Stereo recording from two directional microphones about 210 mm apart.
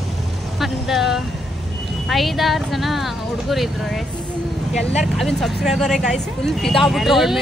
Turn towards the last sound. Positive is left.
turn(degrees=0)  # may be behind; listen again after turning